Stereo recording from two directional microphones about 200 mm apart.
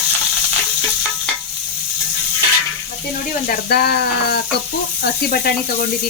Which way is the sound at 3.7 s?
50° left (ahead or behind).